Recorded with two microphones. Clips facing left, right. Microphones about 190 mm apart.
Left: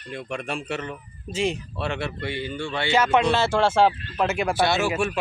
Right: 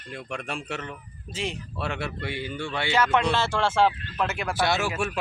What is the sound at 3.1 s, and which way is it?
Speech, 10° left (ahead or behind).